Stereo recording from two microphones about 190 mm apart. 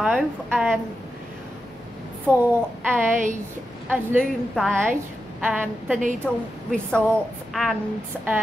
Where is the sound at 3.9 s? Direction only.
10° right (ahead or behind).